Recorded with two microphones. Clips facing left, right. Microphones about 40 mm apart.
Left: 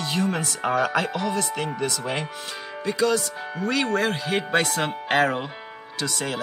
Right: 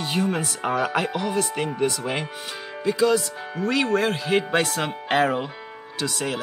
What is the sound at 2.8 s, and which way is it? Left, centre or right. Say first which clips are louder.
Speech: right 2 dB; centre.